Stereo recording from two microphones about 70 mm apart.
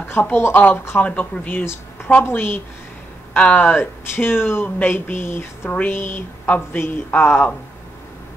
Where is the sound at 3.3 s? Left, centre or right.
Centre.